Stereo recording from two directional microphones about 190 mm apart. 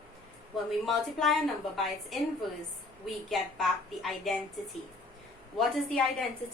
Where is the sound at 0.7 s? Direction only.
Centre (ahead or behind).